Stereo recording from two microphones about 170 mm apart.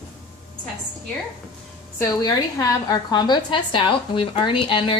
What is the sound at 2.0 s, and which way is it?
A woman's voice, 20° left (ahead or behind).